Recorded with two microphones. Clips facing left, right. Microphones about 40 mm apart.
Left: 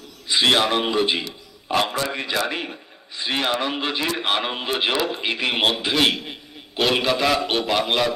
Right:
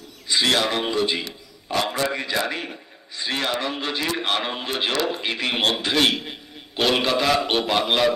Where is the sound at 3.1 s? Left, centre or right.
Centre.